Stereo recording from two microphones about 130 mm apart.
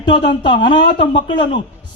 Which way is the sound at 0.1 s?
40° left (ahead or behind).